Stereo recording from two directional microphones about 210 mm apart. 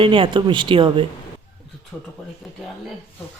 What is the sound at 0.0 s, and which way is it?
Speech, 25° right (ahead or behind).